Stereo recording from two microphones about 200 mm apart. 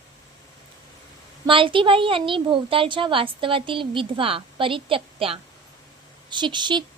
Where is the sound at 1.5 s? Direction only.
25° right (ahead or behind).